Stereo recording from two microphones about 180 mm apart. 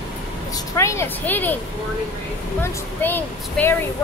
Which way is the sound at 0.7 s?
15° left (ahead or behind).